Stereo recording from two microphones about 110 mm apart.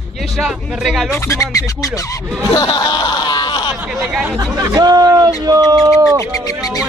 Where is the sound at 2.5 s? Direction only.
40° left (ahead or behind).